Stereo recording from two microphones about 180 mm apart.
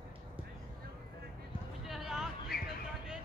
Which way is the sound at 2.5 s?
60° left (ahead or behind).